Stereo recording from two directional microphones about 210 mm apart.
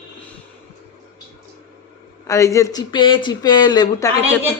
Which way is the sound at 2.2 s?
15° left (ahead or behind).